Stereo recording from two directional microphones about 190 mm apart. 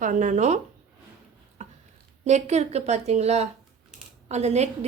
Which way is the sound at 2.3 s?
35° right (ahead or behind).